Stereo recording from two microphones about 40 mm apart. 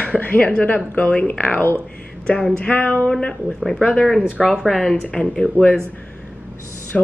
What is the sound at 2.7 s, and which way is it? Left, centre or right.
Speech, left.